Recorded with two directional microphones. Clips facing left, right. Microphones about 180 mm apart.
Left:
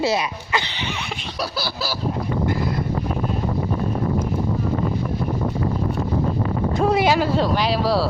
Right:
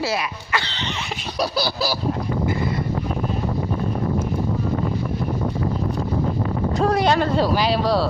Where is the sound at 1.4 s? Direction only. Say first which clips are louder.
Right 5 dB; 20° right (ahead or behind).